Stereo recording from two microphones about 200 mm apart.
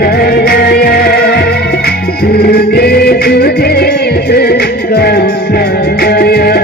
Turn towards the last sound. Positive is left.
turn(degrees=50)  # may be behind; listen again after turning